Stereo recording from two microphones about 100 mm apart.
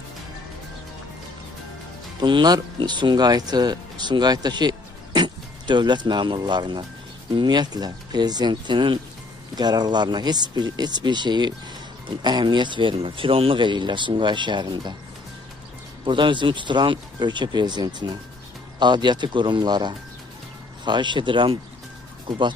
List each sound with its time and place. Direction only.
2.1 s speech: 50° right (ahead or behind)
16.1 s speech: 55° right (ahead or behind)